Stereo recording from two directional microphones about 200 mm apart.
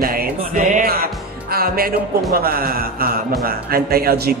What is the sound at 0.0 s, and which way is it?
Music, 45° right (ahead or behind).